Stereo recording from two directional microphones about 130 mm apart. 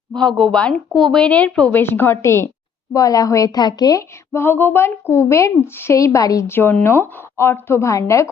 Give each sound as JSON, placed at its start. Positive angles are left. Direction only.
{"t": 0.2, "sound": "a woman's voice", "side_deg": 5}